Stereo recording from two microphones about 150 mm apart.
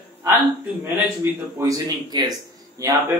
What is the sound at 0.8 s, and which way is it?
A man's voice, 20° right (ahead or behind).